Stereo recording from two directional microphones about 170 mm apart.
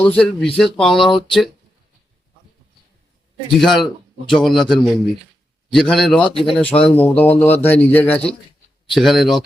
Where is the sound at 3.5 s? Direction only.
Centre (ahead or behind).